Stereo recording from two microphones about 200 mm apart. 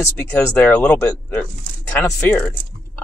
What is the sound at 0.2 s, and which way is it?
Speech, 15° left (ahead or behind).